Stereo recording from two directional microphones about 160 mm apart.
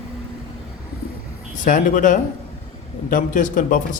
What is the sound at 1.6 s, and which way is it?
Speech, 55° left (ahead or behind).